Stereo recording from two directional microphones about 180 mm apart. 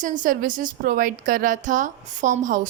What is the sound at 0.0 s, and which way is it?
A woman's voice, 45° right (ahead or behind).